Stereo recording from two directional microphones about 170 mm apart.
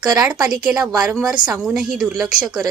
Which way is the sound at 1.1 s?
5° right (ahead or behind).